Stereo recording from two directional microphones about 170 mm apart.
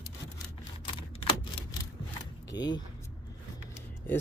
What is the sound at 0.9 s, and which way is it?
Camera, 30° left (ahead or behind).